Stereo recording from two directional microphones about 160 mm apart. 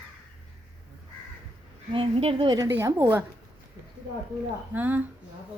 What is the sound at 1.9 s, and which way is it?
A woman's voice, 35° right (ahead or behind).